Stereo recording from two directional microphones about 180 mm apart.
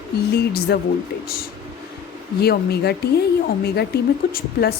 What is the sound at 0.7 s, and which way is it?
Speech, 60° left (ahead or behind).